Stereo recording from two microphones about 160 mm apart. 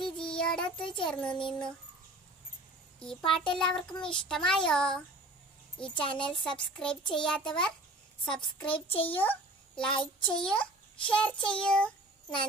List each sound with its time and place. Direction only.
0.3 s child singing: 5° left (ahead or behind)
1.0 s a child's voice: 5° left (ahead or behind)
3.0 s a child's voice: 5° left (ahead or behind)
6.0 s a child's voice: 30° left (ahead or behind)
6.8 s a child's voice: 5° left (ahead or behind)
8.4 s a child's voice: 35° left (ahead or behind)
9.1 s a child's voice: 10° left (ahead or behind)
9.9 s a child's voice: 30° left (ahead or behind)
10.4 s a child's voice: 5° left (ahead or behind)